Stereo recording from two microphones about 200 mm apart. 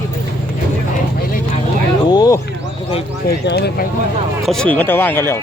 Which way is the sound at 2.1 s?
20° left (ahead or behind).